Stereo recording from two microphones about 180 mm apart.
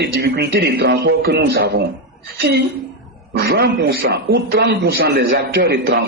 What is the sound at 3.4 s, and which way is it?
A man's voice, 60° right (ahead or behind).